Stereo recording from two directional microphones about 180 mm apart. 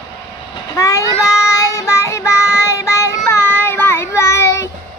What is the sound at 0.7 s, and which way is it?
Child singing, 15° left (ahead or behind).